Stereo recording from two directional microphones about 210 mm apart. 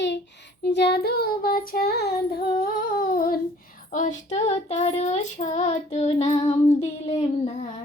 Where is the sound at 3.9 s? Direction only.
35° left (ahead or behind).